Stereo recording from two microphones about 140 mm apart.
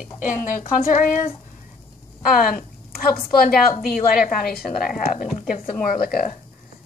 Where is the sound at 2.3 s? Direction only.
90° left.